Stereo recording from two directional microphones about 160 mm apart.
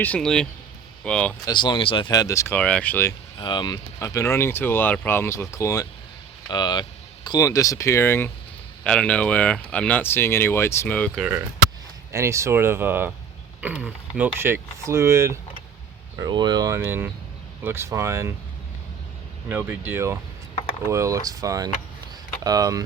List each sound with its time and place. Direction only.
0.0 s speech: 5° left (ahead or behind)
1.5 s speech: 30° left (ahead or behind)
2.6 s speech: 5° left (ahead or behind)
3.3 s speech: 30° left (ahead or behind); by 11.2 s 10° left (ahead or behind)
12.1 s speech: 20° right (ahead or behind)
16.2 s speech: 25° right (ahead or behind)
19.5 s speech: 10° right (ahead or behind)